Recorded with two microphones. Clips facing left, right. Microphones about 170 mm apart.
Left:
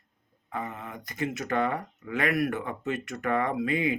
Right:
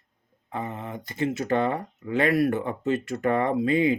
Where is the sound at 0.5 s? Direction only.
25° right (ahead or behind).